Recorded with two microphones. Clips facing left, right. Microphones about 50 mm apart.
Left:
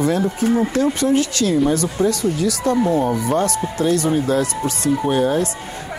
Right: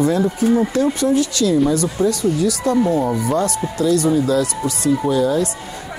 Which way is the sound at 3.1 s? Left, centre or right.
Left.